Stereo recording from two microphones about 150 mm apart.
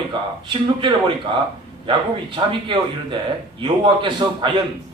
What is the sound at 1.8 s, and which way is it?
A man's voice, 35° right (ahead or behind).